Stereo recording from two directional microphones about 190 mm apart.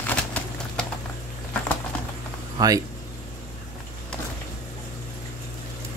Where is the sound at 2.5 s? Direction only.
20° right (ahead or behind).